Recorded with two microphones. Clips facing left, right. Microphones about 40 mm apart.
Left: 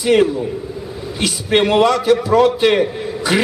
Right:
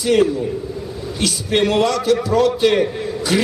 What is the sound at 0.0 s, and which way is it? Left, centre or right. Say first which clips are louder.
A man's voice: left 2 dB; centre.